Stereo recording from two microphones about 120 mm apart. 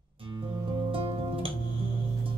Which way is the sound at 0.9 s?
50° right (ahead or behind).